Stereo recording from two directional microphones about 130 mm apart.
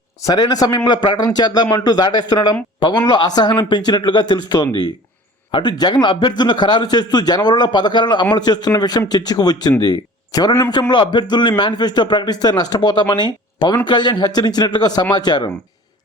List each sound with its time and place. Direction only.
0.2 s a man's voice: 30° left (ahead or behind)